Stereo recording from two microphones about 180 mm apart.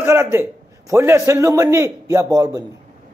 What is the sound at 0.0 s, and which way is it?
Speech, 15° right (ahead or behind).